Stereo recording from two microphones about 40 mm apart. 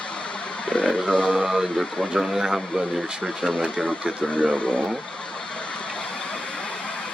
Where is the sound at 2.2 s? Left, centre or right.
Centre.